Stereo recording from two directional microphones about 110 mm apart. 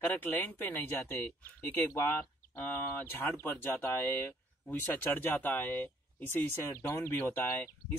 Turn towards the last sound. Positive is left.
turn(degrees=20)  # may be behind; listen again after turning